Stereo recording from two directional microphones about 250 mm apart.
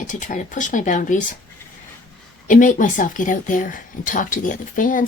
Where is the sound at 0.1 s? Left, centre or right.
Left.